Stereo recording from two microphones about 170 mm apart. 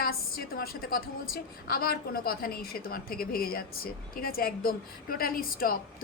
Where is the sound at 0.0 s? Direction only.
60° left (ahead or behind).